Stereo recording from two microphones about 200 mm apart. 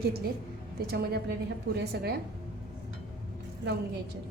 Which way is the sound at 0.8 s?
55° right (ahead or behind).